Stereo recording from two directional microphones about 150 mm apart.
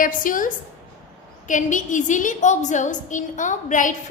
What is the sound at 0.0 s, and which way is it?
A woman's voice, 65° left (ahead or behind).